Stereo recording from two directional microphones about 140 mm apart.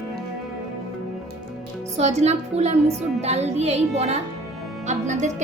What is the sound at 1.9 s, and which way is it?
A woman's voice, 55° right (ahead or behind).